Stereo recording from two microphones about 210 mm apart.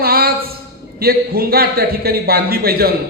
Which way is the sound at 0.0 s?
45° right (ahead or behind).